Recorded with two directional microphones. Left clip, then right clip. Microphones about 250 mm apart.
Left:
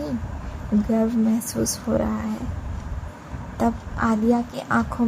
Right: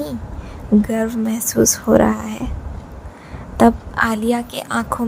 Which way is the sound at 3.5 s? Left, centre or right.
Right.